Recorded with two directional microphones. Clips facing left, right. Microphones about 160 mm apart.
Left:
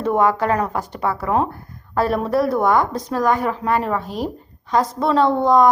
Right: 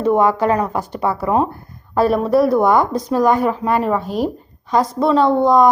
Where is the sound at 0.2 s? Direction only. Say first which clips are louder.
Right 2 dB; 25° right (ahead or behind).